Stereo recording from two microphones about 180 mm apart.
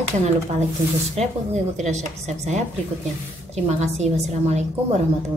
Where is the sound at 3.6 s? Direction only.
40° right (ahead or behind).